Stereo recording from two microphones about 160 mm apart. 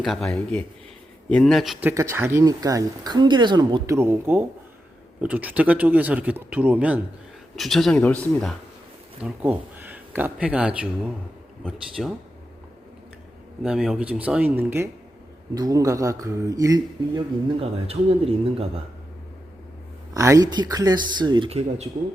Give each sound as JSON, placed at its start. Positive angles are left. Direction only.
{"t": 0.0, "sound": "speech", "side_deg": 0}
{"t": 1.8, "sound": "speech", "side_deg": -15}
{"t": 3.8, "sound": "speech", "side_deg": -15}
{"t": 9.2, "sound": "speech", "side_deg": -10}
{"t": 13.6, "sound": "speech", "side_deg": -5}
{"t": 17.6, "sound": "speech", "side_deg": -40}
{"t": 20.1, "sound": "speech", "side_deg": -20}